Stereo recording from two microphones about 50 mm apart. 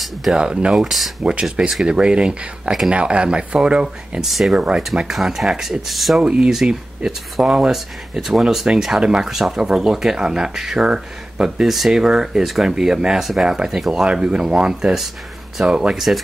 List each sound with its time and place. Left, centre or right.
0.3 s speech: right
4.2 s speech: centre
6.2 s speech: right
11.6 s speech: centre
14.0 s speech: centre